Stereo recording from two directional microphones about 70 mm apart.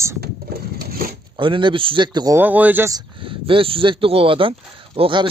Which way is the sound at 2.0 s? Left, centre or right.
Right.